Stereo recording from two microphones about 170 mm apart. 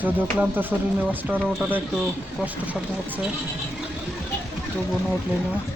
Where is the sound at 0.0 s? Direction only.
10° right (ahead or behind).